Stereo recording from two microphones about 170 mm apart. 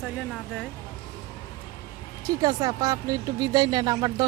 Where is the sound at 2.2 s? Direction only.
20° right (ahead or behind).